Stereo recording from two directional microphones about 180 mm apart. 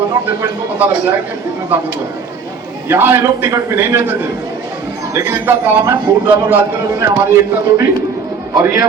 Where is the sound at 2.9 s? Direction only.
15° right (ahead or behind).